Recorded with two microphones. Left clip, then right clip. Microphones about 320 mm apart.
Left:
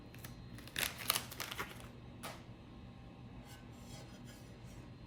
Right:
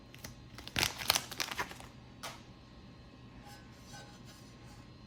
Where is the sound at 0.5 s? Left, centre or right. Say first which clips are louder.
Right 6 dB; right.